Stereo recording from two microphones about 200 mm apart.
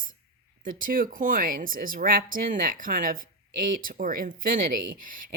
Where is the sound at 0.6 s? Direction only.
45° right (ahead or behind).